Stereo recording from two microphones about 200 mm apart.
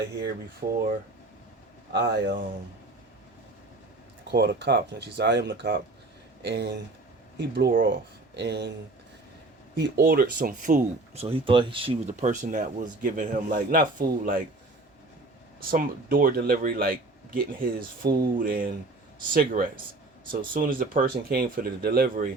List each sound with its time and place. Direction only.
0.6 s speech: 45° right (ahead or behind)
1.9 s speech: 55° right (ahead or behind)
4.3 s speech: 55° right (ahead or behind)
9.7 s speech: 55° right (ahead or behind)
15.6 s speech: 45° right (ahead or behind)